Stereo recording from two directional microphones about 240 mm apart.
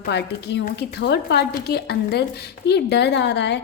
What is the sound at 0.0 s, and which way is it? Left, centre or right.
A woman's voice, left.